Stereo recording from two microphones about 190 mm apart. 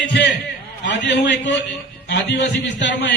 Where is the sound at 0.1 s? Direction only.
65° left (ahead or behind).